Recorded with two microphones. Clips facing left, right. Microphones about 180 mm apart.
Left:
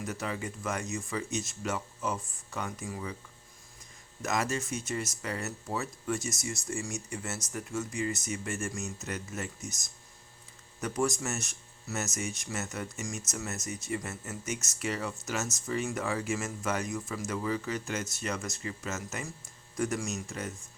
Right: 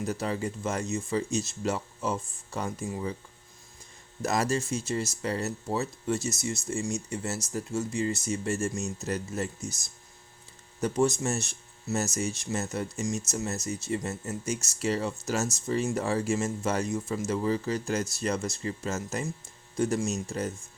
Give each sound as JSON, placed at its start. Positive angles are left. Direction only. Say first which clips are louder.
{"t": 0.0, "sound": "speech", "louder": "right 5 dB", "side_deg": -30}
{"t": 4.2, "sound": "speech", "louder": "right 4 dB", "side_deg": -35}